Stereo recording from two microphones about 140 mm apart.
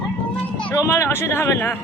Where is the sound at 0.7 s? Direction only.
20° left (ahead or behind).